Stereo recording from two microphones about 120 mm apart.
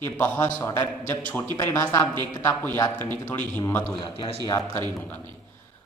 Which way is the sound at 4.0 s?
45° left (ahead or behind).